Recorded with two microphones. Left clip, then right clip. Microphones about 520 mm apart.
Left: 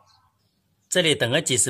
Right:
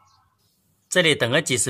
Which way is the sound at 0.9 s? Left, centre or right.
Left.